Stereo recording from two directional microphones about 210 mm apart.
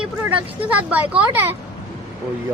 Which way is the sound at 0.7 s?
5° right (ahead or behind).